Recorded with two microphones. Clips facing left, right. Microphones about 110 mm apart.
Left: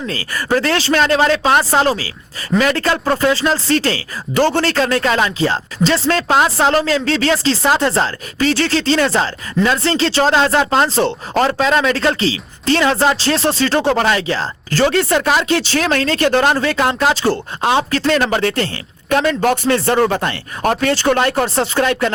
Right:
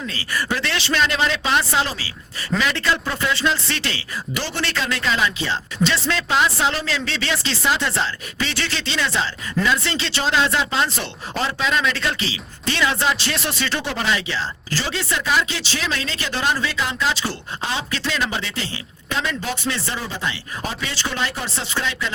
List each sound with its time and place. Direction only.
0.1 s speech: 45° left (ahead or behind)
10.8 s speech: 35° left (ahead or behind)
11.3 s speech: 45° left (ahead or behind)